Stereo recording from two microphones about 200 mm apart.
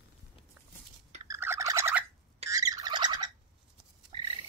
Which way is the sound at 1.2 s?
15° right (ahead or behind).